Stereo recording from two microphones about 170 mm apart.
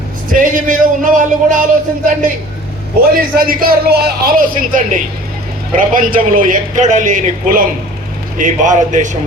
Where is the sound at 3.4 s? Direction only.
60° right (ahead or behind).